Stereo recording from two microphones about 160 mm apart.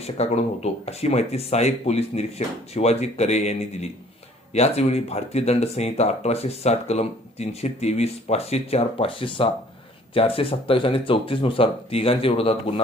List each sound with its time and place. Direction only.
0.0 s speech: 40° left (ahead or behind)